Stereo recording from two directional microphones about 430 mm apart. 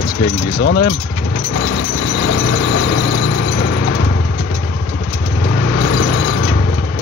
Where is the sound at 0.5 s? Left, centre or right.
Left.